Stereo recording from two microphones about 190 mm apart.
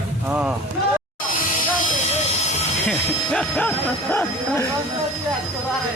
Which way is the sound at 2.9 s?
5° left (ahead or behind).